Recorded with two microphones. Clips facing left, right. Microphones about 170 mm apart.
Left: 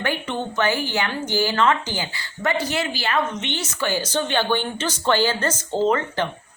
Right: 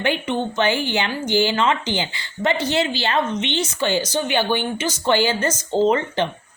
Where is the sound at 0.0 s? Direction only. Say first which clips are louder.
Right 4 dB; 20° right (ahead or behind).